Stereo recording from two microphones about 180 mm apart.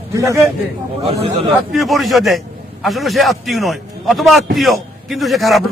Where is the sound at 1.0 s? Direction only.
30° right (ahead or behind).